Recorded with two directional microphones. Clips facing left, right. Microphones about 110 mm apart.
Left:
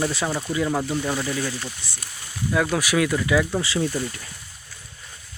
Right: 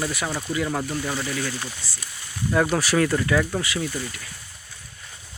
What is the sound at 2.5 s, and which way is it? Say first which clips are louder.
Speech: right 1 dB; centre (ahead or behind).